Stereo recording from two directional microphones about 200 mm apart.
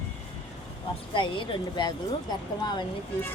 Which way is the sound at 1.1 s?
25° left (ahead or behind).